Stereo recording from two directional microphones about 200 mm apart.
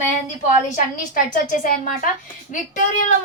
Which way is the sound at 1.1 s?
45° left (ahead or behind).